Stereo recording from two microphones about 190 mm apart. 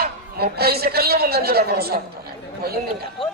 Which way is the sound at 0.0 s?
55° right (ahead or behind).